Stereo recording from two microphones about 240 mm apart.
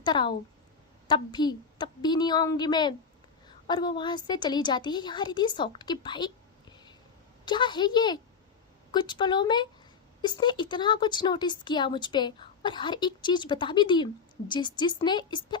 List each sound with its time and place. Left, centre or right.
0.0 s a woman's voice: centre